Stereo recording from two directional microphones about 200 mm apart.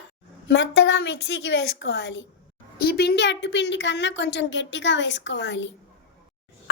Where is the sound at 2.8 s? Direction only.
50° left (ahead or behind).